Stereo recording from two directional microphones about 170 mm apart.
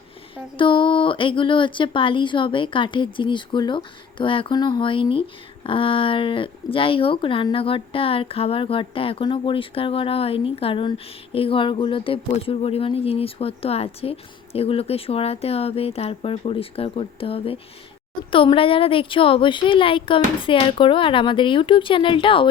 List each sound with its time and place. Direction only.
0.5 s speech: 30° left (ahead or behind)